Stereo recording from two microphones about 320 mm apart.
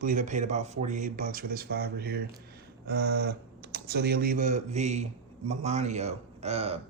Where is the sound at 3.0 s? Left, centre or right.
Right.